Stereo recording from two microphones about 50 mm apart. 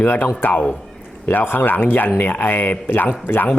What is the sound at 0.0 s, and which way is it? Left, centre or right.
Speech, left.